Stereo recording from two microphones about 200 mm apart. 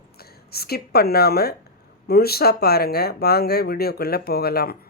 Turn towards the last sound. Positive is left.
turn(degrees=50)  # may be behind; listen again after turning